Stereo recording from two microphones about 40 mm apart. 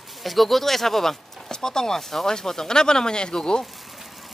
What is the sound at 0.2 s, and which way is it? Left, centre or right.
Speech, centre.